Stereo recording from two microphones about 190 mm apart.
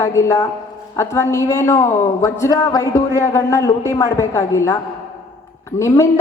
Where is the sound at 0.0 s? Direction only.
15° left (ahead or behind).